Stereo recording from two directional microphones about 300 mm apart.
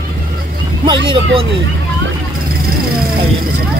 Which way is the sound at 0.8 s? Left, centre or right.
Centre.